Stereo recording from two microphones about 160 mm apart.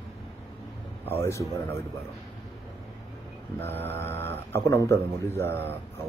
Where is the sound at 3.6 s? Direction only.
15° left (ahead or behind).